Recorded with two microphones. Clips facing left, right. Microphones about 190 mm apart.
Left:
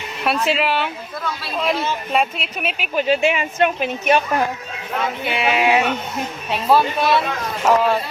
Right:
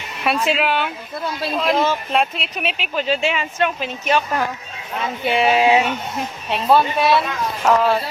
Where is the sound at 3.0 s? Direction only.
15° left (ahead or behind).